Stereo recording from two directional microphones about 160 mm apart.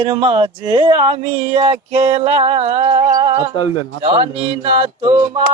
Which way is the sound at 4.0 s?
30° right (ahead or behind).